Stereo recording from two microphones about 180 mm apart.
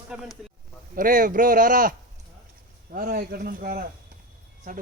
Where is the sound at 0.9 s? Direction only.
50° right (ahead or behind).